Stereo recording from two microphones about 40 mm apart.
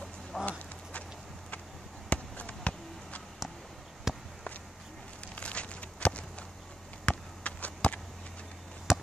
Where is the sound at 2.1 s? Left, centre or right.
Left.